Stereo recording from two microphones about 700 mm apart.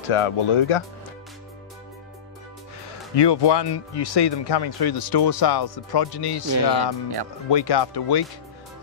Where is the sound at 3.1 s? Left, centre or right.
Left.